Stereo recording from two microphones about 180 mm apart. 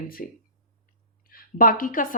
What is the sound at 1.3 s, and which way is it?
Speech, 50° left (ahead or behind).